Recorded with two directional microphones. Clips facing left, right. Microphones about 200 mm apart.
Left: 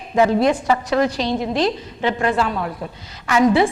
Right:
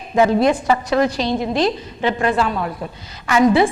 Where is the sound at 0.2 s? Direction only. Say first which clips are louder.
Right 1 dB; 10° right (ahead or behind).